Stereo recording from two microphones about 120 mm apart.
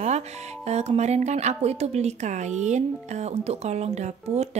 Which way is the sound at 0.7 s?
65° right (ahead or behind).